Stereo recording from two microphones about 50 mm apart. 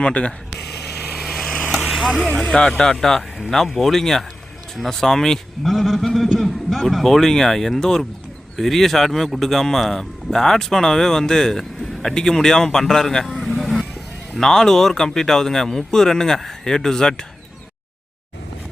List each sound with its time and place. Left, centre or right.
0.0 s speech: left
1.2 s vehicle: centre
2.1 s a man's voice: centre
5.6 s a man's voice: centre
13.2 s vehicle: centre
14.3 s speech: centre